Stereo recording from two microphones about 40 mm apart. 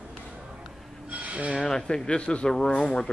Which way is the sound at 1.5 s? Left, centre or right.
Centre.